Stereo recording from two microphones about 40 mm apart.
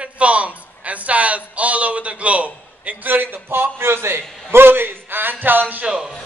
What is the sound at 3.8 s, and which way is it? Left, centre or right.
A man's voice, right.